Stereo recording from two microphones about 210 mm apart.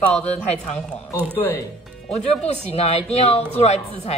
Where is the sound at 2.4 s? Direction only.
30° left (ahead or behind).